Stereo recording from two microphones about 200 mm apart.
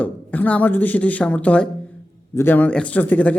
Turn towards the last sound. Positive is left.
turn(degrees=10)  # may be behind; listen again after turning